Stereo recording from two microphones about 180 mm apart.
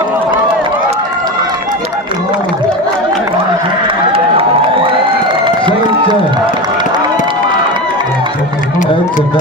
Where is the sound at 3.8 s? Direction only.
30° right (ahead or behind).